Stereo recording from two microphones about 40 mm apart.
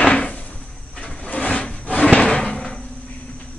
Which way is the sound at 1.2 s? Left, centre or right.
Left.